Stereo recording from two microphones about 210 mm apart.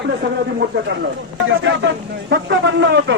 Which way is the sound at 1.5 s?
65° right (ahead or behind).